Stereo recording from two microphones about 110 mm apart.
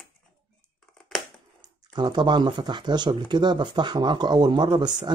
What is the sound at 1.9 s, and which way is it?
Speech, 40° right (ahead or behind).